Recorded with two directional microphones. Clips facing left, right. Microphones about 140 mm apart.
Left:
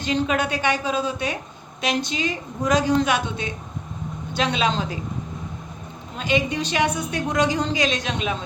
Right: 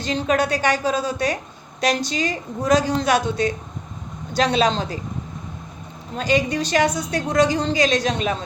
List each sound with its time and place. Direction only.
0.0 s a woman's voice: 35° right (ahead or behind)
6.1 s a woman's voice: 40° right (ahead or behind)